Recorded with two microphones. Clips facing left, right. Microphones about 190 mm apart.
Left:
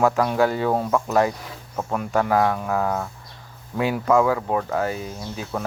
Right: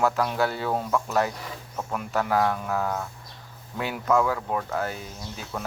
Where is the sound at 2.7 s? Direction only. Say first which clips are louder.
Left 4 dB; 70° left (ahead or behind).